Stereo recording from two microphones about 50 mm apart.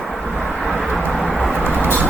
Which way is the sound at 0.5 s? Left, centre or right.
Centre.